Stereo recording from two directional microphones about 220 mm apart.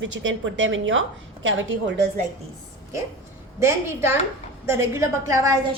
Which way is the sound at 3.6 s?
10° right (ahead or behind).